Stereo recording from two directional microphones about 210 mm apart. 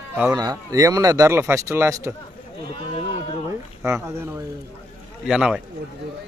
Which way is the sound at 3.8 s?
10° right (ahead or behind).